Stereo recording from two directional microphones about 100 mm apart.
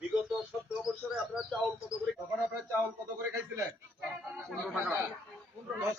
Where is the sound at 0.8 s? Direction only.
5° right (ahead or behind).